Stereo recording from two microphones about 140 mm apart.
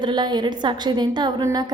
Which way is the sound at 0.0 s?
30° right (ahead or behind).